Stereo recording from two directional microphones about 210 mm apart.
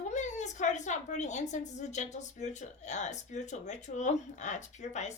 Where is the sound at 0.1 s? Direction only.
35° left (ahead or behind).